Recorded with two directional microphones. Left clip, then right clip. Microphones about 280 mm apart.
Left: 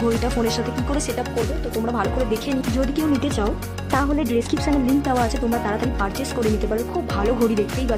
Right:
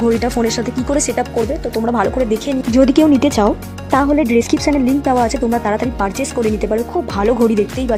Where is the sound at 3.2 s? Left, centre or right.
Centre.